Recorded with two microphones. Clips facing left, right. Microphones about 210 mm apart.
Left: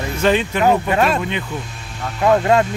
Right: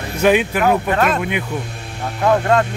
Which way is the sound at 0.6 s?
10° left (ahead or behind).